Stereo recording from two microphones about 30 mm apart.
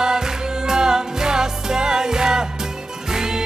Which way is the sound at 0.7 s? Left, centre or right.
Centre.